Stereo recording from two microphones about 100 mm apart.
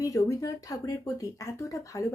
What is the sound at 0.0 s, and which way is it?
Speech, 35° left (ahead or behind).